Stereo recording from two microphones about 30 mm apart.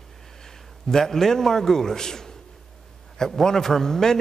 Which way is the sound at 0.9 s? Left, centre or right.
Centre.